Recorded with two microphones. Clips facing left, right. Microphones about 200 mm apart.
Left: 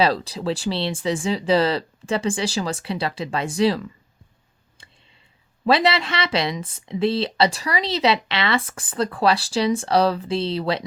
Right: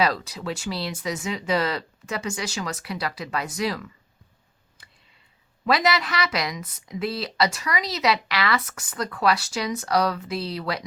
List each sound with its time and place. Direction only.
0.0 s speech: 30° left (ahead or behind)
4.8 s clicking: 25° left (ahead or behind)
5.6 s speech: 30° left (ahead or behind)